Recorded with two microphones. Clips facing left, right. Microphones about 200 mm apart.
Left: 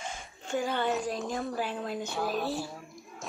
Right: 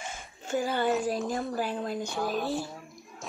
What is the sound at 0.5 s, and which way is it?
Speech, 5° right (ahead or behind).